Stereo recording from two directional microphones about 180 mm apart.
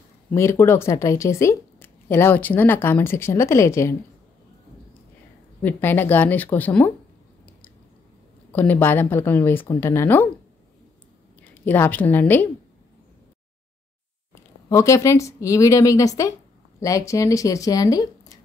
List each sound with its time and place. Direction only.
0.3 s speech: 15° left (ahead or behind)
5.6 s speech: 10° left (ahead or behind)
8.5 s speech: 10° left (ahead or behind)
11.4 s a woman's voice: 10° left (ahead or behind)
14.3 s speech: 15° left (ahead or behind)